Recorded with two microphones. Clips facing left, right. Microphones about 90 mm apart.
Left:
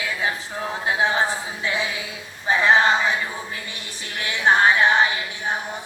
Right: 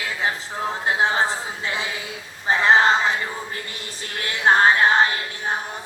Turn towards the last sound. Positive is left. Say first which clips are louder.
# right 1 dB
turn(degrees=-40)  # may be behind; listen again after turning